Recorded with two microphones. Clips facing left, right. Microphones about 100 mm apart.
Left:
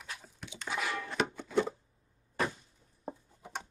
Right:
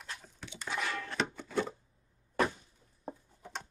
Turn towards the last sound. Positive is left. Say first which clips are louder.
# left 1 dB
turn(degrees=10)  # may be behind; listen again after turning